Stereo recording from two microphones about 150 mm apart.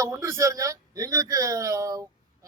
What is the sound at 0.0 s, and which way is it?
A man's voice, 20° right (ahead or behind).